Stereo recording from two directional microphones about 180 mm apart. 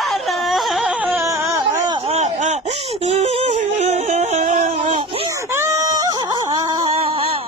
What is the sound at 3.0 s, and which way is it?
Yodeling, 35° right (ahead or behind).